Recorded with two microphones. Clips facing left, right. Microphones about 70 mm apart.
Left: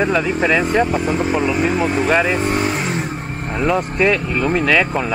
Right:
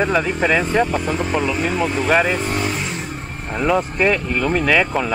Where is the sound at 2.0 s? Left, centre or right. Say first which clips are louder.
Right 1 dB; centre.